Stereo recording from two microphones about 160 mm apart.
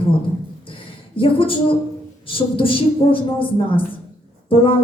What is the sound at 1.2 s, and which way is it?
A woman's voice, 35° left (ahead or behind).